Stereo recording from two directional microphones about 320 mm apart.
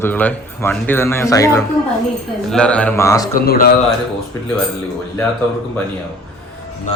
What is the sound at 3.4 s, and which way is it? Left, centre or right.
Speech, left.